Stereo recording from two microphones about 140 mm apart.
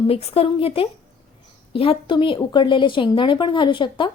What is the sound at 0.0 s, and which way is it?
A woman's voice, 45° left (ahead or behind).